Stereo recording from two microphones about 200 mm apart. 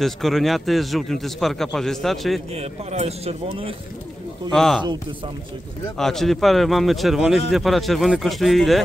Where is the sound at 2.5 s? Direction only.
30° right (ahead or behind).